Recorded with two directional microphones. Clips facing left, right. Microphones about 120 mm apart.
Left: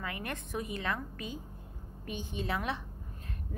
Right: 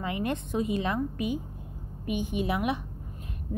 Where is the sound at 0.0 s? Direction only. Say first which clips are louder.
Right 9 dB; 20° right (ahead or behind).